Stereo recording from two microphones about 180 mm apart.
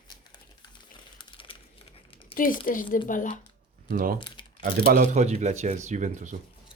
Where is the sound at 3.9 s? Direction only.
50° right (ahead or behind).